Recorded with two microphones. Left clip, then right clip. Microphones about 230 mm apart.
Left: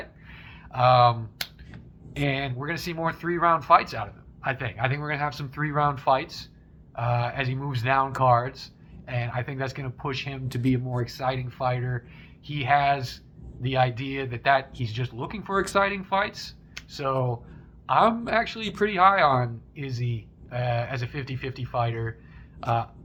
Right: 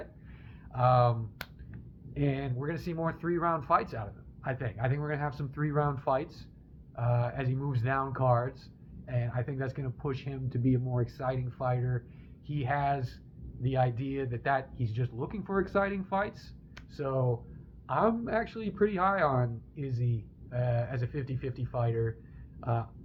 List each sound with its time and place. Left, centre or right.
0.7 s speech: centre